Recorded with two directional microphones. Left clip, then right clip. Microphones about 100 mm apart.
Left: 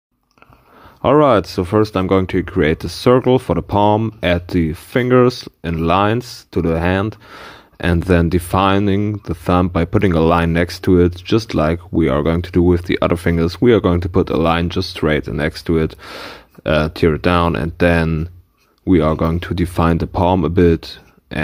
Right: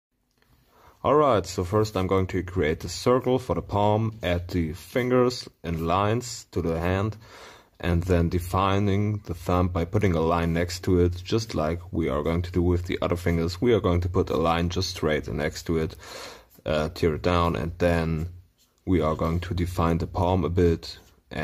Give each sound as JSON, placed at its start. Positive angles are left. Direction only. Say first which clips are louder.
{"t": 1.0, "sound": "speech", "louder": "left 9 dB", "side_deg": 30}